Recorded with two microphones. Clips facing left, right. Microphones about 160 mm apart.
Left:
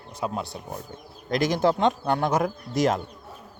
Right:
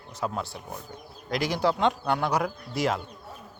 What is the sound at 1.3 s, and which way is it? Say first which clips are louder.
Speech: left 4 dB; 45° left (ahead or behind).